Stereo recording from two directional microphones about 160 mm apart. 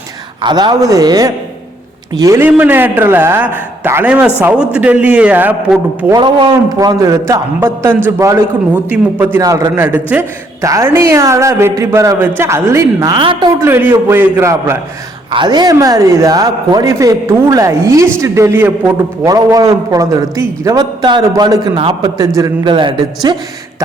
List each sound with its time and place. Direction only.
0.4 s a man's voice: 25° right (ahead or behind); by 6.1 s 10° right (ahead or behind)
6.1 s a man's voice: 25° right (ahead or behind)
13.7 s speech: 15° right (ahead or behind)
15.3 s a man's voice: 30° right (ahead or behind)